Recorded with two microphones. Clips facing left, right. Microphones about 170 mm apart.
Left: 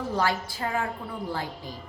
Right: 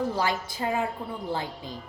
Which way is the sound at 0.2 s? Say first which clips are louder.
Left 1 dB; 20° right (ahead or behind).